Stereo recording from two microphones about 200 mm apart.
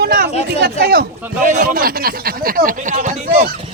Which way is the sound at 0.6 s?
50° right (ahead or behind).